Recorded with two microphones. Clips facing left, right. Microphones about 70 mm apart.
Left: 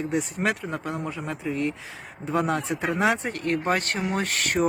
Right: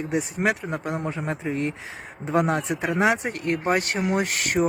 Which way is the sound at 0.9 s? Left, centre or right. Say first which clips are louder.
Right 4 dB; right.